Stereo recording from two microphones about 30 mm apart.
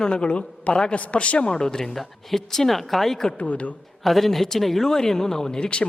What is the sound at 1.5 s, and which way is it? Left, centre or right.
Speech, left.